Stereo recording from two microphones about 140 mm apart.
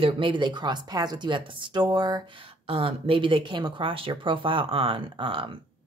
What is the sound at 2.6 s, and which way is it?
Speech, 40° right (ahead or behind).